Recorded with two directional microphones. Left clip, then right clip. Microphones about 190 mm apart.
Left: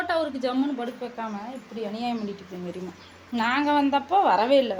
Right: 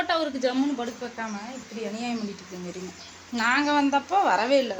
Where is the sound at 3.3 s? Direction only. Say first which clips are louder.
Even; 15° left (ahead or behind).